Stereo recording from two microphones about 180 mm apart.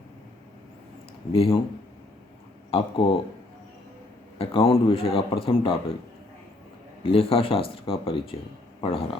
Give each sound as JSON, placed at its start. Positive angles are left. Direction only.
{"t": 1.3, "sound": "a man's voice", "side_deg": 30}
{"t": 2.6, "sound": "speech", "side_deg": 30}
{"t": 4.4, "sound": "a man's voice", "side_deg": 30}
{"t": 7.0, "sound": "a man's voice", "side_deg": 30}